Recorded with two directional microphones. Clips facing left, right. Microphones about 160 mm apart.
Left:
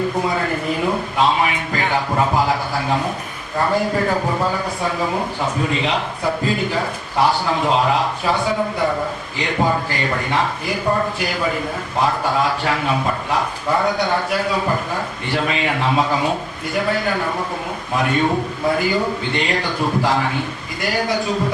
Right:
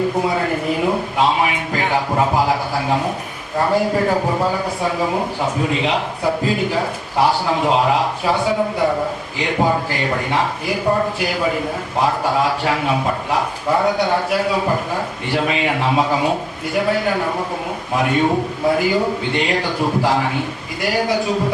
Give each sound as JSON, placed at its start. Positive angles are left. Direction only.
{"t": 0.2, "sound": "a man's voice", "side_deg": -10}